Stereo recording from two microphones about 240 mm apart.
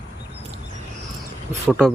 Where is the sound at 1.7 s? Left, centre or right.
Centre.